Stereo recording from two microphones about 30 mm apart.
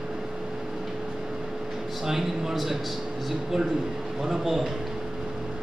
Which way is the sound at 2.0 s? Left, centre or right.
Centre.